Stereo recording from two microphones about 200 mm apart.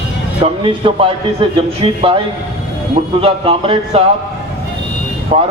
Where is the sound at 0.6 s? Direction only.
25° right (ahead or behind).